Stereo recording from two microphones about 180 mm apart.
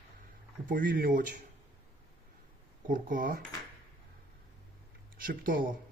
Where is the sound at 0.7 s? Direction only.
50° right (ahead or behind).